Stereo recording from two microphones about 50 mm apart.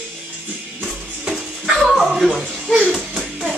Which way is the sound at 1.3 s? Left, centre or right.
Centre.